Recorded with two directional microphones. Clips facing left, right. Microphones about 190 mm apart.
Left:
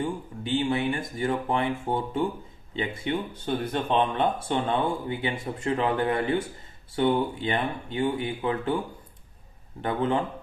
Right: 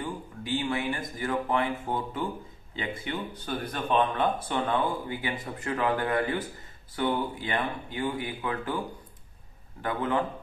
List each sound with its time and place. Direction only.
0.0 s speech: 25° left (ahead or behind)
9.8 s speech: 25° left (ahead or behind)